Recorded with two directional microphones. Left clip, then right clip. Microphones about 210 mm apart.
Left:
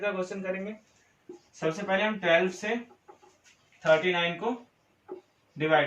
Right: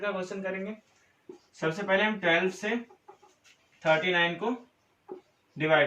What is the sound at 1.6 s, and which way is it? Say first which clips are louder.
Speech: right 1 dB; 10° left (ahead or behind).